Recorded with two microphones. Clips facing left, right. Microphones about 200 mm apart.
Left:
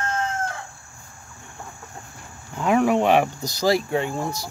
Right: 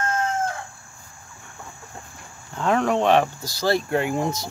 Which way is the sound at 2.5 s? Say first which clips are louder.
Left 2 dB; 10° left (ahead or behind).